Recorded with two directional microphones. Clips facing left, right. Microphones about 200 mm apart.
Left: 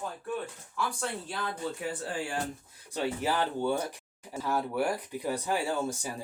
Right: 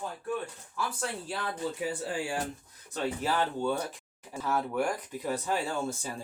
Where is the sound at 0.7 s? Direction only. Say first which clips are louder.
Left 1 dB; centre (ahead or behind).